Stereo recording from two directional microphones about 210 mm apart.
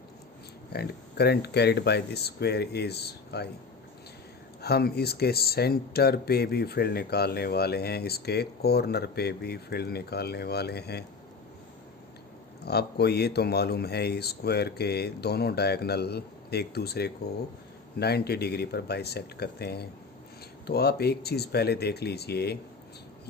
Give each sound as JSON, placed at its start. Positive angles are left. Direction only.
{"t": 0.7, "sound": "speech", "side_deg": 50}
{"t": 4.6, "sound": "speech", "side_deg": 50}
{"t": 12.6, "sound": "speech", "side_deg": 50}